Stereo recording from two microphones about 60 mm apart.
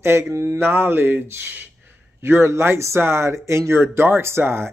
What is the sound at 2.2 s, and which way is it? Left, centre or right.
Speech, right.